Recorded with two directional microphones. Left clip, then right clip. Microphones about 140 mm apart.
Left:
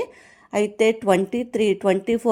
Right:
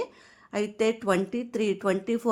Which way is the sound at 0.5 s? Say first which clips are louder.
Left 7 dB; 20° left (ahead or behind).